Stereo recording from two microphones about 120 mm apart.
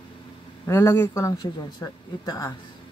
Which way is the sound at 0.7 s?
20° left (ahead or behind).